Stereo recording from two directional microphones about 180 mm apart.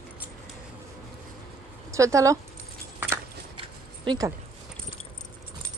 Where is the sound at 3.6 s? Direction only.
25° right (ahead or behind).